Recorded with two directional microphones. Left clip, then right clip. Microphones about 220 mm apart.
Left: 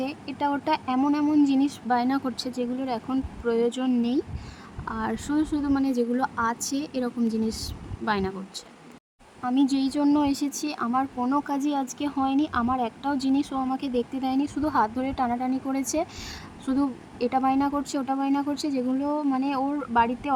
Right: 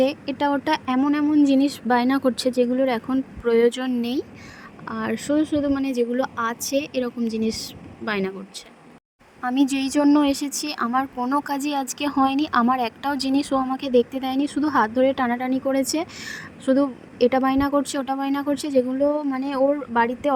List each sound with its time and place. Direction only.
0.0 s a woman's voice: 20° right (ahead or behind)
1.0 s a woman's voice: 5° right (ahead or behind); by 20.3 s 20° right (ahead or behind)